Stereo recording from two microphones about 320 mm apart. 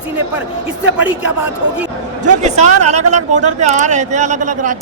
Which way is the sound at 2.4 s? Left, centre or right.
Right.